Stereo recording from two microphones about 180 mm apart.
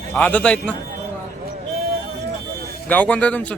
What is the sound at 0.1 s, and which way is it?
Speech, 10° left (ahead or behind).